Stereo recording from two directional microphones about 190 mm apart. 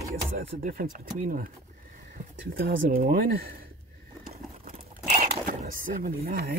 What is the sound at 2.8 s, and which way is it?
Speech, 45° right (ahead or behind).